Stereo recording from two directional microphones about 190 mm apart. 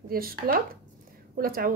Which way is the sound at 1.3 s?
50° right (ahead or behind).